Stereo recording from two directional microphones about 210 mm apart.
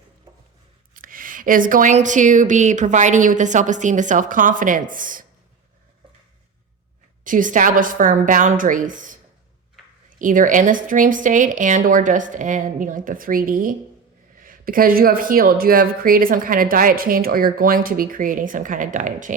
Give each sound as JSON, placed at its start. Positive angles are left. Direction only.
{"t": 0.9, "sound": "speech", "side_deg": -40}
{"t": 7.3, "sound": "speech", "side_deg": -40}